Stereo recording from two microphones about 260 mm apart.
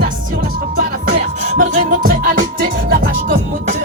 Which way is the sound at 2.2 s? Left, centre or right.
Right.